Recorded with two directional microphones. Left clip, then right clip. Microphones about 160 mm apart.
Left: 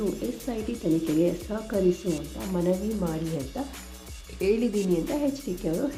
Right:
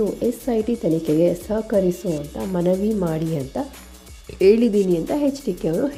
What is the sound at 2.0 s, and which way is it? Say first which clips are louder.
Speech: right 6 dB; centre (ahead or behind).